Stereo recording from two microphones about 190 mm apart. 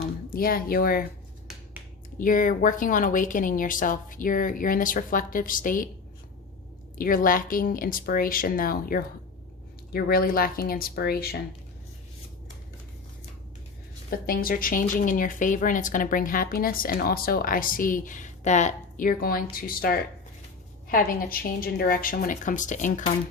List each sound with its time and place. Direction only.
0.3 s a woman's voice: 50° left (ahead or behind)
2.1 s a woman's voice: 45° left (ahead or behind)
7.0 s a woman's voice: 45° left (ahead or behind)
14.1 s a woman's voice: 50° left (ahead or behind)